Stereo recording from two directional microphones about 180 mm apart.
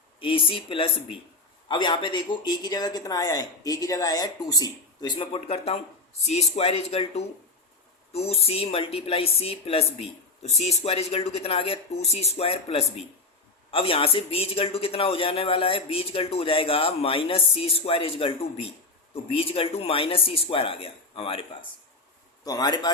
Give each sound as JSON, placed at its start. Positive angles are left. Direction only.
{"t": 0.2, "sound": "a man's voice", "side_deg": 30}
{"t": 22.4, "sound": "speech", "side_deg": 25}